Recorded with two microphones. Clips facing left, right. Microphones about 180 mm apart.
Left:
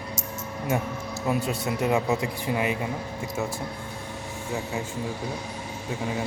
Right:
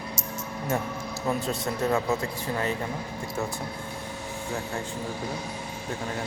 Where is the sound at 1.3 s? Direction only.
10° left (ahead or behind).